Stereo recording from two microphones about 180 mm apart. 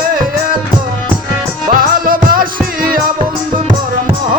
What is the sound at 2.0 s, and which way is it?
Music, 50° right (ahead or behind).